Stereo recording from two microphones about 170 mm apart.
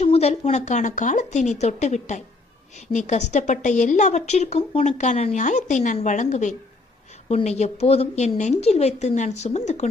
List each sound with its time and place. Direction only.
0.0 s a woman's voice: 40° left (ahead or behind)